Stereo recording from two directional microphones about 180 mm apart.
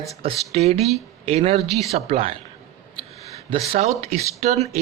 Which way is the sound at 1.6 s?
Centre (ahead or behind).